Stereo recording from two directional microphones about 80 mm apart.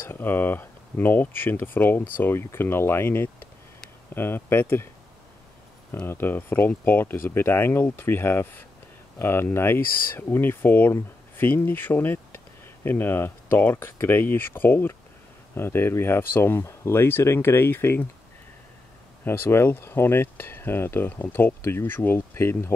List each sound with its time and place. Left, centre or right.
0.0 s speech: left
5.9 s speech: left
19.2 s speech: left